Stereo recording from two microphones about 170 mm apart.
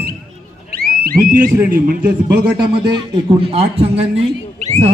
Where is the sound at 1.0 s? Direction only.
60° right (ahead or behind).